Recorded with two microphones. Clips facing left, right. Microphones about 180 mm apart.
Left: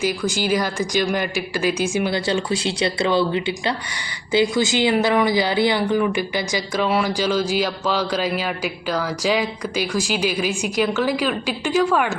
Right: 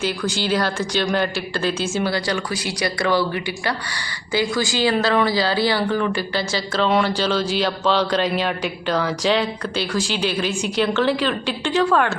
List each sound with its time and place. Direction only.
0.0 s speech: 10° left (ahead or behind)